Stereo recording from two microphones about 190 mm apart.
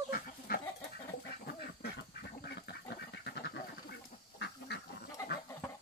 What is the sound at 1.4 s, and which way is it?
Duck, 55° left (ahead or behind).